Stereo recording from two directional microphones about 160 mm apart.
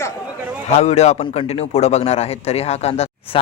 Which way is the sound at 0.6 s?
45° left (ahead or behind).